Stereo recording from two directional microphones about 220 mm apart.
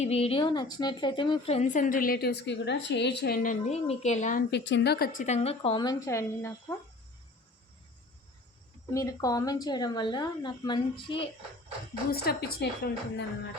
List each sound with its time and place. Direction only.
0.0 s a woman's voice: 25° left (ahead or behind)
4.5 s a woman's voice: 55° left (ahead or behind); by 6.7 s 15° left (ahead or behind)
8.9 s a woman's voice: 15° left (ahead or behind)
12.1 s a woman's voice: 45° left (ahead or behind)